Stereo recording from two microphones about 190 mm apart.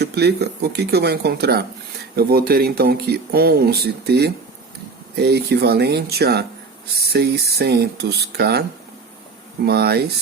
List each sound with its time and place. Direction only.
0.0 s speech: 60° right (ahead or behind)
9.6 s speech: 55° right (ahead or behind)